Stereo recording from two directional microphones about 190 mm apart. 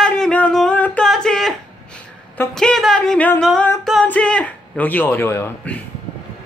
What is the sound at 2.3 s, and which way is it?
A woman's voice, 10° left (ahead or behind).